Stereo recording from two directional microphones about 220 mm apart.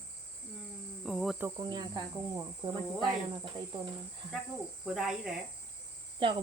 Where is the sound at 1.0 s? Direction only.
Centre (ahead or behind).